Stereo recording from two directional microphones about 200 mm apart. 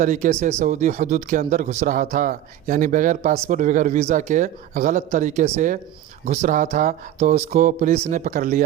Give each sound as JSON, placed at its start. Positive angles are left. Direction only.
{"t": 0.0, "sound": "speech", "side_deg": -40}